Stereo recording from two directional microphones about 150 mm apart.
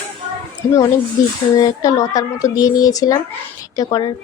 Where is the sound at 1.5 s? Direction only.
25° left (ahead or behind).